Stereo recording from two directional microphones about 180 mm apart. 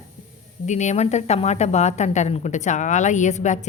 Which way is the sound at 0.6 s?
40° left (ahead or behind).